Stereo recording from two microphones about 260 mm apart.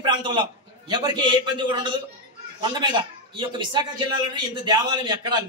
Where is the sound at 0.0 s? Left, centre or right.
Centre.